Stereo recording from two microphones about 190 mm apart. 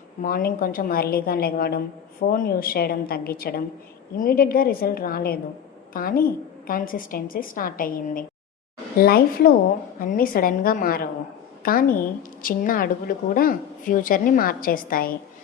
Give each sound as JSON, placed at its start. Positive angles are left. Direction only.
{"t": 0.2, "sound": "a woman's voice", "side_deg": 50}